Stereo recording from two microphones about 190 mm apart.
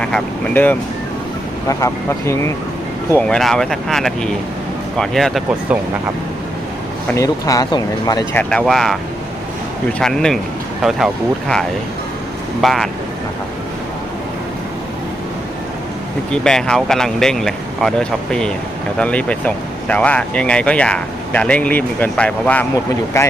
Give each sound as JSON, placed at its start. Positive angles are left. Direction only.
{"t": 0.0, "sound": "speech", "side_deg": 5}
{"t": 3.1, "sound": "speech", "side_deg": 5}
{"t": 7.1, "sound": "speech", "side_deg": 15}
{"t": 10.0, "sound": "speech", "side_deg": 5}
{"t": 12.6, "sound": "speech", "side_deg": 0}
{"t": 16.3, "sound": "speech", "side_deg": 5}